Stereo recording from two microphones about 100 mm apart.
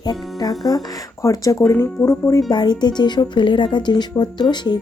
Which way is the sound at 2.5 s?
45° left (ahead or behind).